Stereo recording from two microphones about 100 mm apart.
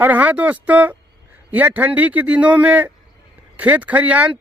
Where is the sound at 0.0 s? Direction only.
15° right (ahead or behind).